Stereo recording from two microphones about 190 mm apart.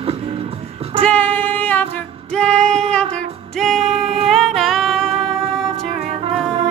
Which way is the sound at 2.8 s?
5° left (ahead or behind).